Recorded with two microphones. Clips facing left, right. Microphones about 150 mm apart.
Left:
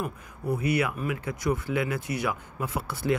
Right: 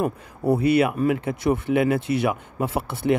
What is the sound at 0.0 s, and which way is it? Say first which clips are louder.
Speech: right 9 dB; 30° right (ahead or behind).